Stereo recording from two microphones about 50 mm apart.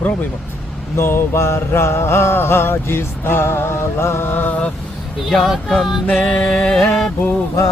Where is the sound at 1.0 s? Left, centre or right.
Left.